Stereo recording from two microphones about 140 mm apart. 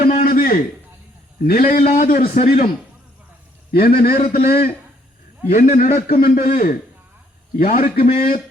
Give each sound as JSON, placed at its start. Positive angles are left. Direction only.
{"t": 0.0, "sound": "a sound", "side_deg": 85}
{"t": 1.4, "sound": "a man's voice", "side_deg": 90}
{"t": 2.4, "sound": "a man's voice", "side_deg": 50}
{"t": 3.7, "sound": "a man's voice", "side_deg": 90}
{"t": 5.5, "sound": "a man's voice", "side_deg": 60}